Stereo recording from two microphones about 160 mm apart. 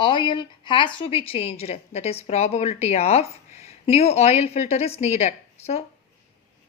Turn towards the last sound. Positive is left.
turn(degrees=40)  # may be behind; listen again after turning